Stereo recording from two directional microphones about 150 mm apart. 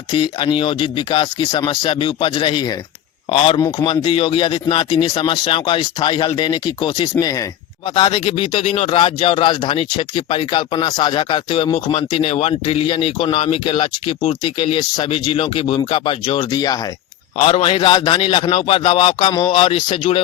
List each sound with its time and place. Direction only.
0.1 s speech: 35° left (ahead or behind)
17.3 s speech: 40° left (ahead or behind)